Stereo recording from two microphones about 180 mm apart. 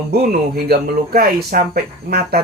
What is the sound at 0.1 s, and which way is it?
Speech, 60° right (ahead or behind).